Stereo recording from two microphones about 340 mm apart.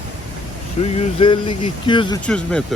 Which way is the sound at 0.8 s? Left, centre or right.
Centre.